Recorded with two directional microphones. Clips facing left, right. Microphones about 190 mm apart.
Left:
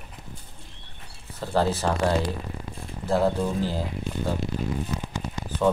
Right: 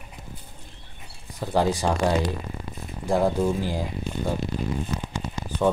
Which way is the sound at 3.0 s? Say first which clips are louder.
Right 1 dB; 15° right (ahead or behind).